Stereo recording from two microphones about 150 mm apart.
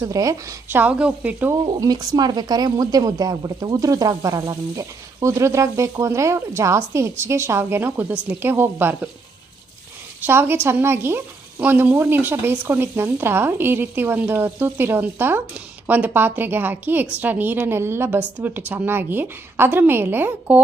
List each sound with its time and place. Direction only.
0.0 s speech: 20° right (ahead or behind)
1.8 s speech: 25° right (ahead or behind)
10.2 s speech: 15° right (ahead or behind)